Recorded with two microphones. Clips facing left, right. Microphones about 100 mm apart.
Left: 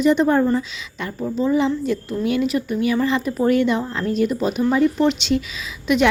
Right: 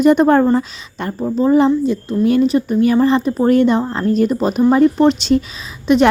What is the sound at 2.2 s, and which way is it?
Speech, 35° right (ahead or behind).